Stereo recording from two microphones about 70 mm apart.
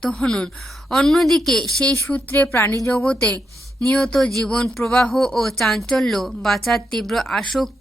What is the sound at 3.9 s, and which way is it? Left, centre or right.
A woman's voice, centre.